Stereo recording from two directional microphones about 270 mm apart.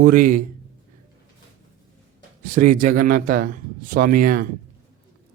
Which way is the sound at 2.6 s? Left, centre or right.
Right.